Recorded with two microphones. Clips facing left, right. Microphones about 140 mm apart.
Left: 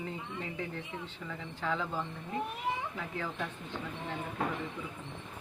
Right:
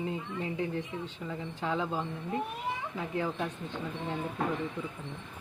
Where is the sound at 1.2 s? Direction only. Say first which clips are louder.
Right 1 dB; 15° right (ahead or behind).